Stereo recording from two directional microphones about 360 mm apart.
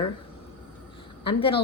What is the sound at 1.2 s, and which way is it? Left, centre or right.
Speech, centre.